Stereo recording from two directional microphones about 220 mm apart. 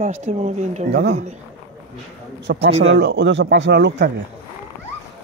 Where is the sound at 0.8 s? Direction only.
50° right (ahead or behind).